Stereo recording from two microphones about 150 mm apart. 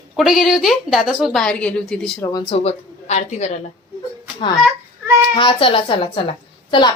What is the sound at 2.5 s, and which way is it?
A woman's voice, 45° left (ahead or behind).